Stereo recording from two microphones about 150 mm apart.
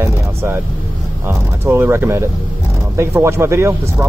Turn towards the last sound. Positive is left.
turn(degrees=-15)  # may be behind; listen again after turning